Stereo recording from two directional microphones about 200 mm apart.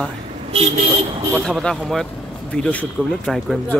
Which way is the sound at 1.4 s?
5° left (ahead or behind).